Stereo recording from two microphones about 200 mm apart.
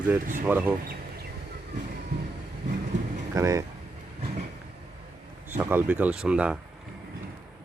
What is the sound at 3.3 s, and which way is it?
Speech, 15° right (ahead or behind).